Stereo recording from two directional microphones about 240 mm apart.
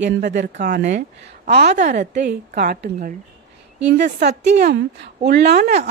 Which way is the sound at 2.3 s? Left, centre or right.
Right.